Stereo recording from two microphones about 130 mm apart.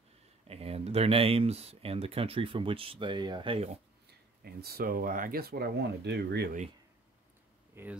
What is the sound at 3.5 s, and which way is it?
Speech, 55° right (ahead or behind).